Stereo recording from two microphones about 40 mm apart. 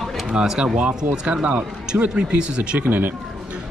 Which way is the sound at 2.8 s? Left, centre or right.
Right.